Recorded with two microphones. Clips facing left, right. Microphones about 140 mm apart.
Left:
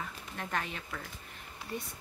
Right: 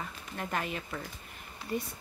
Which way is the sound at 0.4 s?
5° right (ahead or behind).